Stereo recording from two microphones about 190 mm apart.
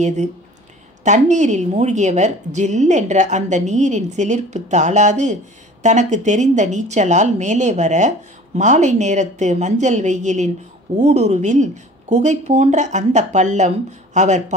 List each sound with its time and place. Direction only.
0.0 s a woman's voice: 40° right (ahead or behind)